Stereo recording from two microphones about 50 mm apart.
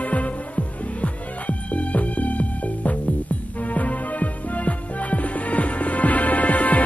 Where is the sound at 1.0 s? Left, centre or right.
Left.